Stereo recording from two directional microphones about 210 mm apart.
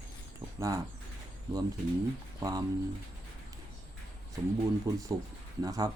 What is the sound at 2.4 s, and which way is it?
Speech, 20° right (ahead or behind).